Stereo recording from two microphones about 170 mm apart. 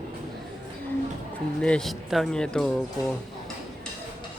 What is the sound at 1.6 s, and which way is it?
Speech, 5° left (ahead or behind).